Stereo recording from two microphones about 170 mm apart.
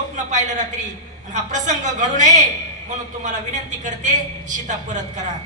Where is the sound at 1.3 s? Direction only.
45° right (ahead or behind).